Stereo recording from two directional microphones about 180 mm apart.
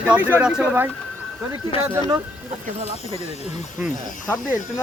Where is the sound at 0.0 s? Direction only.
10° right (ahead or behind).